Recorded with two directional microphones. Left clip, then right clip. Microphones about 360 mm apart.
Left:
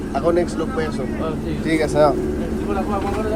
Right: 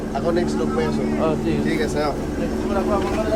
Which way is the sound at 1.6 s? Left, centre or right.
Centre.